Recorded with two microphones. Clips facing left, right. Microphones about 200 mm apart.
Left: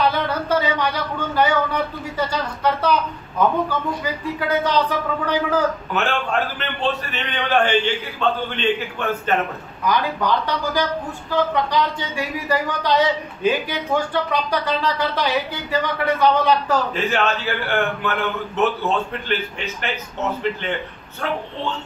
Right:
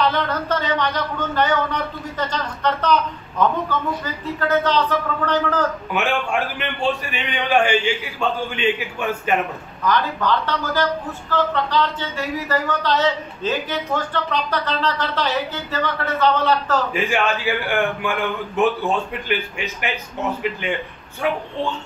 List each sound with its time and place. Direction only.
0.0 s a sound: 10° left (ahead or behind)
4.0 s a woman's voice: 10° left (ahead or behind)
5.9 s a man's voice: 15° right (ahead or behind)
9.8 s a woman's voice: 10° left (ahead or behind)
17.1 s a man's voice: 15° right (ahead or behind)